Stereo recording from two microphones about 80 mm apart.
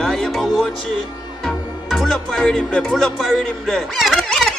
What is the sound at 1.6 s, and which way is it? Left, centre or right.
Music, left.